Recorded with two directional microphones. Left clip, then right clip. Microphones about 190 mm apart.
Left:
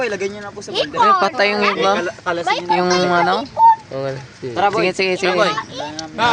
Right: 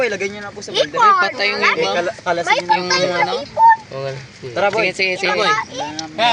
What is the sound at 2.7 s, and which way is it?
Speech, 40° left (ahead or behind).